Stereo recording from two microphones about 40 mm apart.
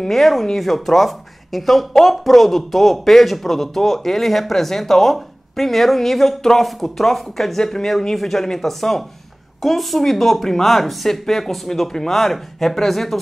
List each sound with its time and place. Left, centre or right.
0.1 s speech: centre